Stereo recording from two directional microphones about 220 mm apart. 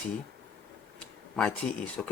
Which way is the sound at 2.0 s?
Centre (ahead or behind).